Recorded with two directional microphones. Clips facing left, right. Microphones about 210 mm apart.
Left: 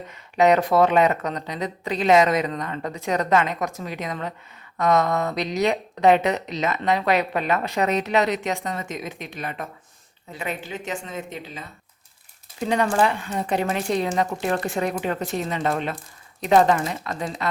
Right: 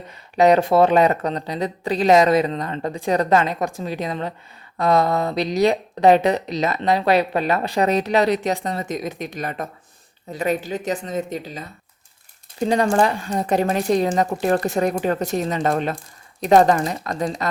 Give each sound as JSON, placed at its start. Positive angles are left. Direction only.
{"t": 0.3, "sound": "speech", "side_deg": -35}